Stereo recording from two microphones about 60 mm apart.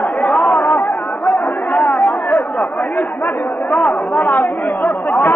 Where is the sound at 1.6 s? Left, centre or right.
Centre.